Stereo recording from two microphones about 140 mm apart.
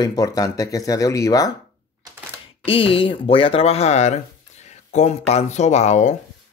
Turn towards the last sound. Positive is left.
turn(degrees=55)  # may be behind; listen again after turning